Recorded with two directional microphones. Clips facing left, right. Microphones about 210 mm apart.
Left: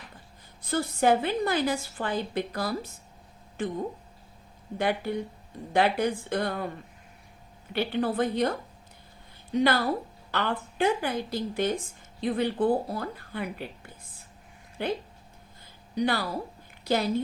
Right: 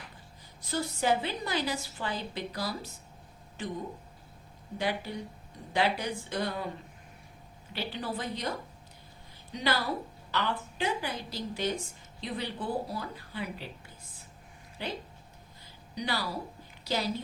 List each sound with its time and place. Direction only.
0.7 s a woman's voice: 55° left (ahead or behind)
4.8 s speech: 55° left (ahead or behind)
7.7 s a woman's voice: 55° left (ahead or behind)
14.8 s a woman's voice: 55° left (ahead or behind)
16.0 s a woman's voice: 55° left (ahead or behind)